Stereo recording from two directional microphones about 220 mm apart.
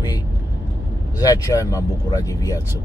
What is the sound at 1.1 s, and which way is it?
Speech, 15° left (ahead or behind).